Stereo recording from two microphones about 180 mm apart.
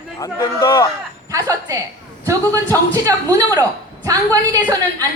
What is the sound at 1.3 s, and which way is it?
Speech, 20° right (ahead or behind).